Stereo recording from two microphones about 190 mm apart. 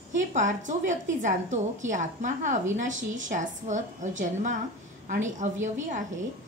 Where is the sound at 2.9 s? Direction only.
80° right.